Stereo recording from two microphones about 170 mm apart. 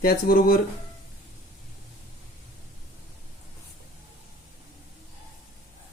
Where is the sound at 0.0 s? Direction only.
60° left (ahead or behind).